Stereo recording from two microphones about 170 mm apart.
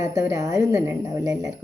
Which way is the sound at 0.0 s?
20° right (ahead or behind).